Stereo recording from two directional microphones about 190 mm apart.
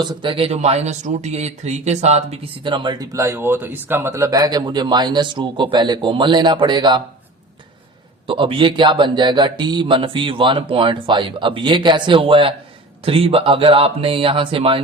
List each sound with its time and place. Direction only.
0.0 s speech: 25° right (ahead or behind)
8.3 s speech: 25° right (ahead or behind)